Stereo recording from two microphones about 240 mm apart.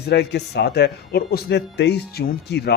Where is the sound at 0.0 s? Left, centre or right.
Left.